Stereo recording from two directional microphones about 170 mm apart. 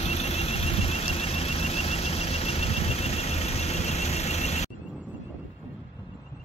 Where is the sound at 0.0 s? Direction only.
40° left (ahead or behind).